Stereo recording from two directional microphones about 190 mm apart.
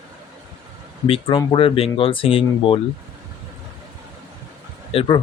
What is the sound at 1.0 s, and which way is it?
Speech, 30° left (ahead or behind).